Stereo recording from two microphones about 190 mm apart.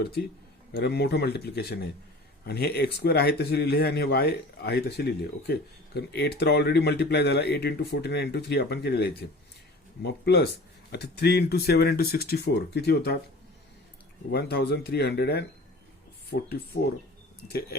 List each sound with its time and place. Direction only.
0.0 s speech: 60° left (ahead or behind)
14.3 s speech: 55° left (ahead or behind)